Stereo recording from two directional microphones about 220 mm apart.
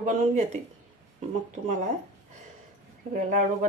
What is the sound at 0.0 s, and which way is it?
Speech, 35° right (ahead or behind).